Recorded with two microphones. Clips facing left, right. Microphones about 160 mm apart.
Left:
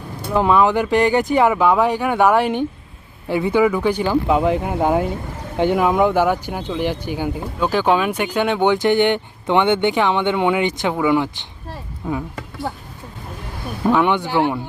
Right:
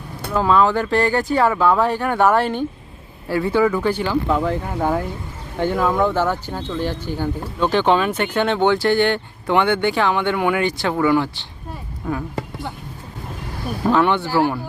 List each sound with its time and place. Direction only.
0.3 s speech: 15° left (ahead or behind)
14.0 s speech: 15° left (ahead or behind)